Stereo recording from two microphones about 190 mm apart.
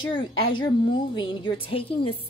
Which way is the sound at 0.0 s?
25° left (ahead or behind).